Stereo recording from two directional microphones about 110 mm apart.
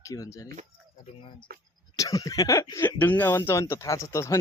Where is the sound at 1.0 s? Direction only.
50° left (ahead or behind).